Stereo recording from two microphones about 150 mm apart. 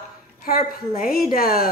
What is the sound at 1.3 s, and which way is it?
Speech, 75° left (ahead or behind).